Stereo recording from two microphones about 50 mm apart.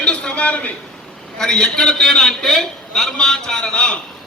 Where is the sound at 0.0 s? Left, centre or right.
Centre.